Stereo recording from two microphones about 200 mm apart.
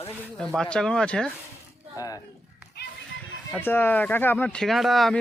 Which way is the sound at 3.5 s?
10° left (ahead or behind).